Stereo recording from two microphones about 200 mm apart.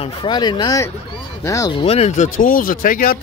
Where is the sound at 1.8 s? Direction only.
30° left (ahead or behind).